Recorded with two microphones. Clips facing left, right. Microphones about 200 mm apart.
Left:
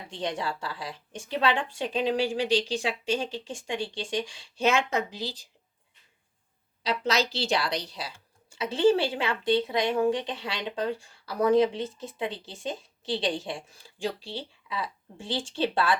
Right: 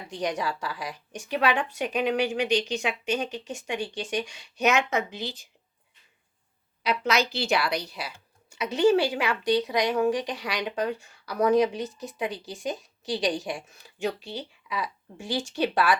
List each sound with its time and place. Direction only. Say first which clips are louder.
0.1 s speech: right 2 dB; 25° left (ahead or behind)
6.8 s a woman's voice: right 1 dB; 30° left (ahead or behind)